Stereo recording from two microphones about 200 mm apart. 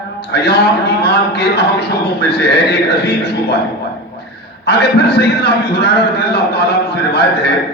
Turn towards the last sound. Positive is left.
turn(degrees=55)  # may be behind; listen again after turning